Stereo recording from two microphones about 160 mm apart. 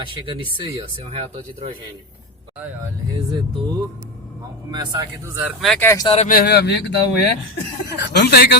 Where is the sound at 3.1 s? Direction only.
25° right (ahead or behind).